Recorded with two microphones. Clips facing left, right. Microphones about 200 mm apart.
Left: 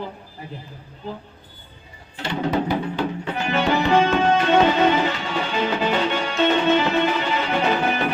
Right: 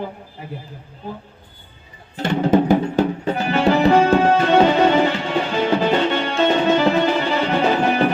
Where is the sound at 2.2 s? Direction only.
45° right (ahead or behind).